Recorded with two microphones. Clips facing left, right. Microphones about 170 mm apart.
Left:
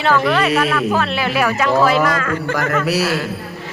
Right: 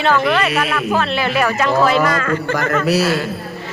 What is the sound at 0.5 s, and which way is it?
Music, 10° right (ahead or behind).